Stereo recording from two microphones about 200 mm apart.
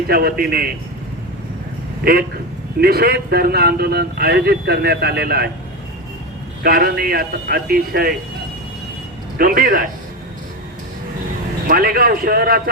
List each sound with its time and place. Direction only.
0.1 s a man's voice: 50° right (ahead or behind)
2.8 s a man's voice: 50° right (ahead or behind)
6.6 s a man's voice: 50° right (ahead or behind)
9.4 s a man's voice: 45° right (ahead or behind)
11.7 s a man's voice: 45° right (ahead or behind)